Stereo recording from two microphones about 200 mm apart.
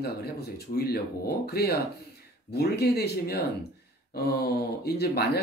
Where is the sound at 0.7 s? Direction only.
50° left (ahead or behind).